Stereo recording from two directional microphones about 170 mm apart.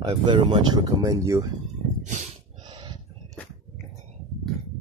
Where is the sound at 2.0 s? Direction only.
45° right (ahead or behind).